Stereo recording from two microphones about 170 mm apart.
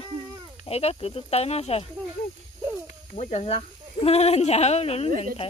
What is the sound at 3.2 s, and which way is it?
Speech, 40° left (ahead or behind).